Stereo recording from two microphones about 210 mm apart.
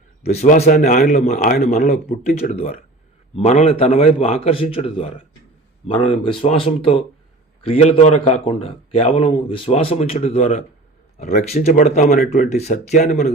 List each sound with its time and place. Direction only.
0.3 s a man's voice: 35° left (ahead or behind)